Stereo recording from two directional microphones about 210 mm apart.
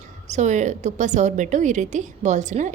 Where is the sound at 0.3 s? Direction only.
35° right (ahead or behind).